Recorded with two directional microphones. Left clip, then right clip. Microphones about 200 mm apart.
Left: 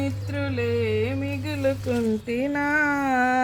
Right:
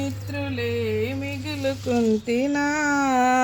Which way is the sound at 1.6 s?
45° right (ahead or behind).